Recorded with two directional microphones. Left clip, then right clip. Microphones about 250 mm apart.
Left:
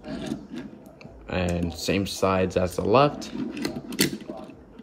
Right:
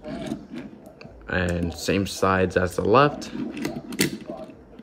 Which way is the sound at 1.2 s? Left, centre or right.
Centre.